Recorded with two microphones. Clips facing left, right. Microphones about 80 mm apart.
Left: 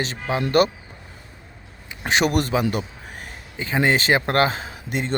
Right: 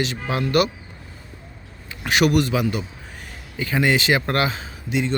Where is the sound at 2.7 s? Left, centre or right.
Left.